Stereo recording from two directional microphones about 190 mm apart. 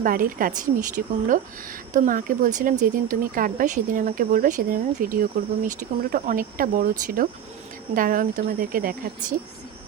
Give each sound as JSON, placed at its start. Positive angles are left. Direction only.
{"t": 0.0, "sound": "speech", "side_deg": -45}